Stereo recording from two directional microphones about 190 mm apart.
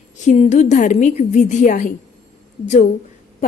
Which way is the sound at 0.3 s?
40° left (ahead or behind).